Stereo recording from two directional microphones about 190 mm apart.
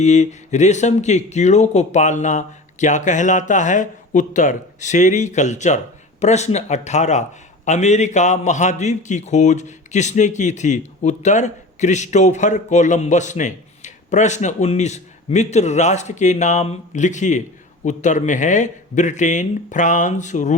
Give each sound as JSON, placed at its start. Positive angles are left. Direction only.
{"t": 0.0, "sound": "speech", "side_deg": 35}